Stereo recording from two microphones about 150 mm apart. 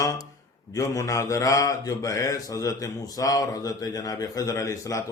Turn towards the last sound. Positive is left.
turn(degrees=20)  # may be behind; listen again after turning